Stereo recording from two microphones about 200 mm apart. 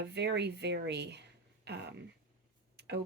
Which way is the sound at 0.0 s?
60° right (ahead or behind).